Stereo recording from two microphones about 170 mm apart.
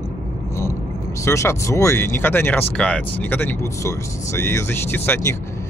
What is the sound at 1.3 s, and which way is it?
Speech, 15° left (ahead or behind).